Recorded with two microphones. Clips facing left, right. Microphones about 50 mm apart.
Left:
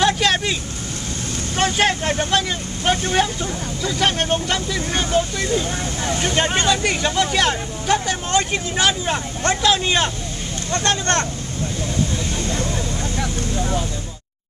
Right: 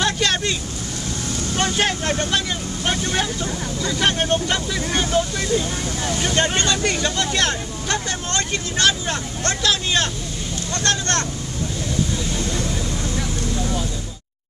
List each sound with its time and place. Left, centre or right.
0.0 s vehicle: centre
1.6 s speech: centre
6.2 s speech: centre; by 11.2 s left
12.4 s vehicle: left